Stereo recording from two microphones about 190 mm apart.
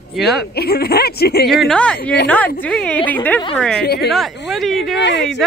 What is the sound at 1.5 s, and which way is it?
Speech, centre (ahead or behind).